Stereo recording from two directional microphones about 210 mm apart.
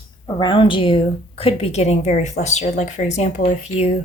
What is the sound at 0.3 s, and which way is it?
A woman's voice, 20° left (ahead or behind).